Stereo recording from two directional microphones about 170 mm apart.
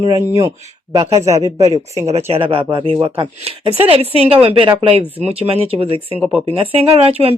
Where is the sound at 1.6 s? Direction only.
40° right (ahead or behind).